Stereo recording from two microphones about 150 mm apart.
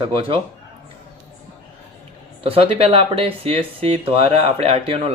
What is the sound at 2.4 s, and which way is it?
Speech, 40° right (ahead or behind).